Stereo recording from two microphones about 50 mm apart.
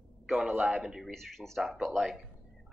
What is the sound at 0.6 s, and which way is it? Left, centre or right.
Speech, centre.